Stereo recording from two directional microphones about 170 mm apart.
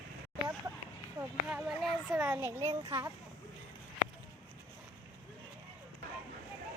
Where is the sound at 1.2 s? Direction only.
5° right (ahead or behind).